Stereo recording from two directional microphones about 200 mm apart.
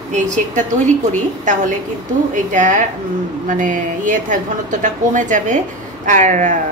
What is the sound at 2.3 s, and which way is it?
A woman's voice, 40° right (ahead or behind).